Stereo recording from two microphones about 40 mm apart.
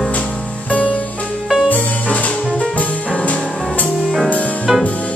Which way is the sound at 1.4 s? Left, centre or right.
Centre.